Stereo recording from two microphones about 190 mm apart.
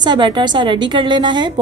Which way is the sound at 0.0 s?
25° right (ahead or behind).